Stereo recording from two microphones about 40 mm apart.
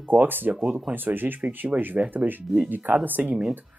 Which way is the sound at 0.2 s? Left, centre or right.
Right.